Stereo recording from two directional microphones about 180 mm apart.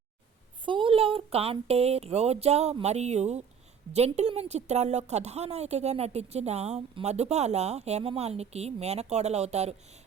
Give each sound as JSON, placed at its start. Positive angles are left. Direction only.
{"t": 0.6, "sound": "a woman's voice", "side_deg": -30}